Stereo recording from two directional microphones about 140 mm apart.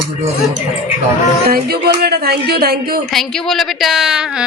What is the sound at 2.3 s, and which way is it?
Speech, 90° right.